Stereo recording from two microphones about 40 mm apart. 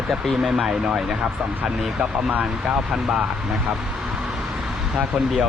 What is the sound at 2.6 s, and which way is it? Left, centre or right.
Speech, centre.